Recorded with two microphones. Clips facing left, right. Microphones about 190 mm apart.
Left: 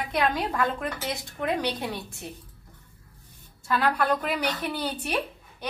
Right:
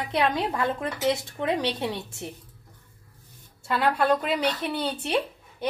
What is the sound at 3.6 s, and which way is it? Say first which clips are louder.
A woman's voice: right 2 dB; 25° right (ahead or behind).